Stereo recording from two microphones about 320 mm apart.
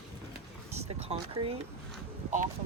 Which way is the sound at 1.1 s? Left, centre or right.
Centre.